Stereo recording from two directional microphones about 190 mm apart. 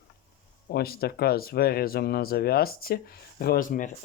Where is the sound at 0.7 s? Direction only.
55° left (ahead or behind).